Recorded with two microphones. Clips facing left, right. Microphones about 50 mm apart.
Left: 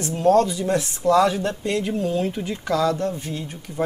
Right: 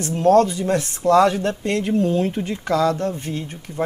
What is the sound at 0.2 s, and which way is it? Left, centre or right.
Speech, right.